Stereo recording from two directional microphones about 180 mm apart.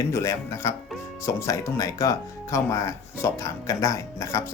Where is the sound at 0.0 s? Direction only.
15° left (ahead or behind).